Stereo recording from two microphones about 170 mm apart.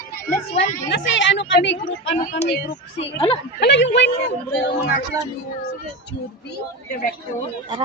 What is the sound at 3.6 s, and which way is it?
Speech, 85° left.